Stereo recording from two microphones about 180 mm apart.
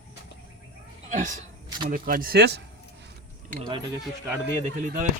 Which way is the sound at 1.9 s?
55° right (ahead or behind).